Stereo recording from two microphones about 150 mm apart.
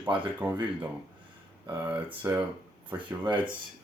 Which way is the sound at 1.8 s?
10° right (ahead or behind).